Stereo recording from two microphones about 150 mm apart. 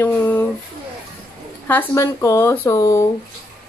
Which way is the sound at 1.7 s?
15° left (ahead or behind).